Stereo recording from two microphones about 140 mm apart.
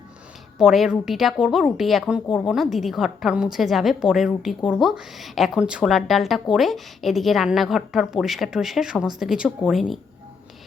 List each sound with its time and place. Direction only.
0.6 s a woman's voice: 5° right (ahead or behind)